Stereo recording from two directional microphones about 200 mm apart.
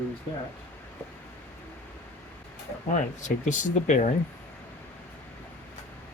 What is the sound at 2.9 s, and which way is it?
Speech, 40° left (ahead or behind).